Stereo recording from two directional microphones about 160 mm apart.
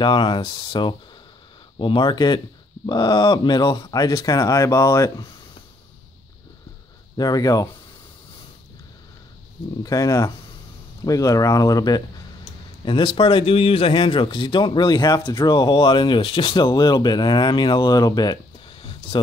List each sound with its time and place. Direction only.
0.0 s speech: 30° left (ahead or behind)
7.2 s speech: 25° left (ahead or behind)
9.8 s speech: 20° left (ahead or behind)